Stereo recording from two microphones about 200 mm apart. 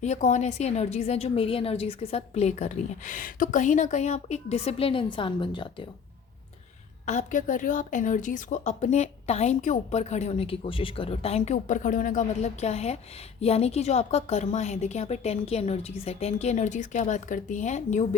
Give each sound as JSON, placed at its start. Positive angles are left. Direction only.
{"t": 0.0, "sound": "a woman's voice", "side_deg": 35}
{"t": 7.0, "sound": "a woman's voice", "side_deg": 35}